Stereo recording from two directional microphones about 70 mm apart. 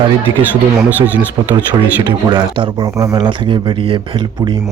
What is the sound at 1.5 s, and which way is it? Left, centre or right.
Speech, right.